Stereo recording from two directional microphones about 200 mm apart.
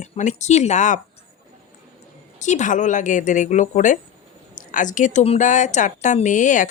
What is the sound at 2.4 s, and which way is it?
A woman's voice, 35° left (ahead or behind).